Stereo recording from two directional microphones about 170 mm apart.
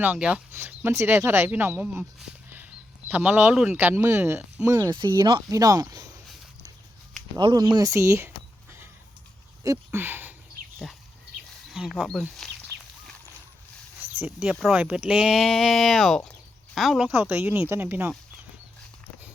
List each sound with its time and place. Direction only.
0.0 s speech: 10° right (ahead or behind)
3.1 s speech: 10° right (ahead or behind)
7.3 s speech: 25° right (ahead or behind)
9.6 s speech: 15° right (ahead or behind)
11.7 s speech: centre (ahead or behind)
14.2 s speech: 5° right (ahead or behind)